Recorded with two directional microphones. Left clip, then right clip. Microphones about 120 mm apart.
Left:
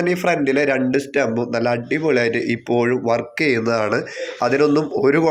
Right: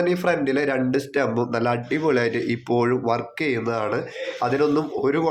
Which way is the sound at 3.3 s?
20° left (ahead or behind).